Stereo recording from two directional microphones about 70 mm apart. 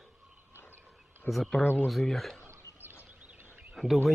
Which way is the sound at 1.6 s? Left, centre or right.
Left.